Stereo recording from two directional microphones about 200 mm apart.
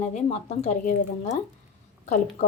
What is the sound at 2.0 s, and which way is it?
Speech, 35° left (ahead or behind).